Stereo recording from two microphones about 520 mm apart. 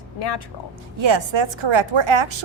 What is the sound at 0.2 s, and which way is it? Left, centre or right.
Speech, left.